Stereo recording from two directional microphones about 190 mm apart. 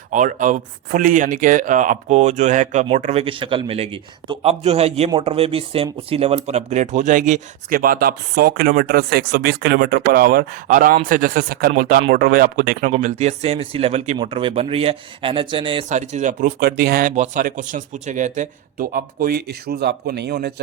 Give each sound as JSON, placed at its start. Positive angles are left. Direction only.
{"t": 0.1, "sound": "speech", "side_deg": -40}
{"t": 15.9, "sound": "speech", "side_deg": -40}
{"t": 16.6, "sound": "speech", "side_deg": -55}